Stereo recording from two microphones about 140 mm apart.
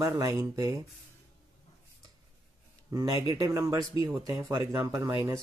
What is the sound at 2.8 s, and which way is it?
Speech, 25° right (ahead or behind).